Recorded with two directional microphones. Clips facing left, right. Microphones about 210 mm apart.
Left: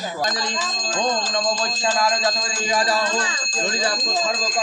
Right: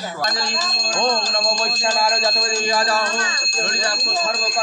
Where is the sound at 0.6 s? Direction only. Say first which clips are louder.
Right 1 dB; 40° right (ahead or behind).